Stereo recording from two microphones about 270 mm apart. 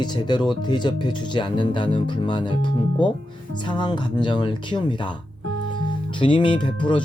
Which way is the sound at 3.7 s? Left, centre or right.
Centre.